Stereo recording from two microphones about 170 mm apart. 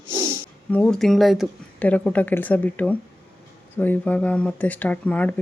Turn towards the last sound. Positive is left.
turn(degrees=10)  # may be behind; listen again after turning